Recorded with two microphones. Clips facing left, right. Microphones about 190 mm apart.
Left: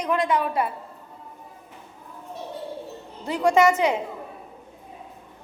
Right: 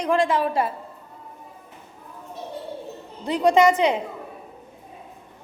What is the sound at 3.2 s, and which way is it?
Speech, 20° right (ahead or behind).